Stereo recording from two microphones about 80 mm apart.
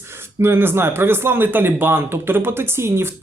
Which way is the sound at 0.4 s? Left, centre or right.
Right.